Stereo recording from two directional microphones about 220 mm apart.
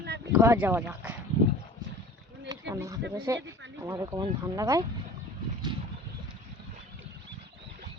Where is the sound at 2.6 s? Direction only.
15° right (ahead or behind).